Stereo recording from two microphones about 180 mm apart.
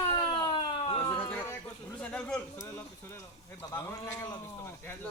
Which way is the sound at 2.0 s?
5° left (ahead or behind).